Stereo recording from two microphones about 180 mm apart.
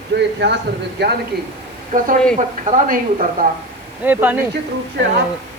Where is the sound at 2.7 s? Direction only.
45° right (ahead or behind).